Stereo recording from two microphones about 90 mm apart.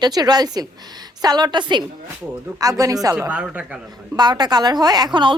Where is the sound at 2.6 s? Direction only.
40° right (ahead or behind).